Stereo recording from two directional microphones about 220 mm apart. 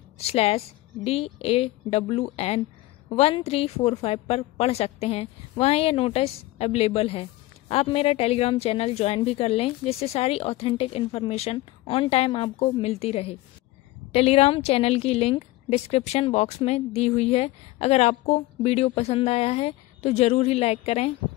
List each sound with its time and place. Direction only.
0.2 s a woman's voice: 25° left (ahead or behind)